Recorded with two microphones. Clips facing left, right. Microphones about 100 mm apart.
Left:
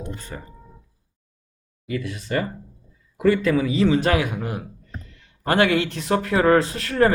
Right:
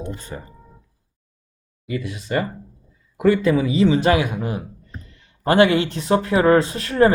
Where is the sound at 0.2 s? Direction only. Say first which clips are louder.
Right 2 dB; 20° right (ahead or behind).